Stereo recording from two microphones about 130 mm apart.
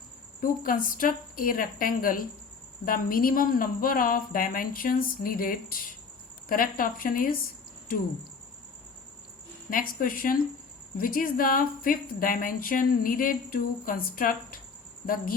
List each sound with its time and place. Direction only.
0.4 s speech: 90° left
9.6 s speech: 90° left